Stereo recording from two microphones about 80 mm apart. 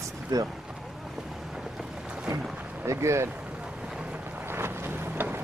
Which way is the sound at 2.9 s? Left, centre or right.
Right.